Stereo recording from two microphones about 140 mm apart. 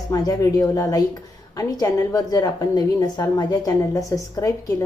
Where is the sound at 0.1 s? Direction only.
25° left (ahead or behind).